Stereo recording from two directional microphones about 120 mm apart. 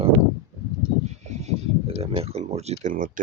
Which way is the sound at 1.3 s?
70° right (ahead or behind).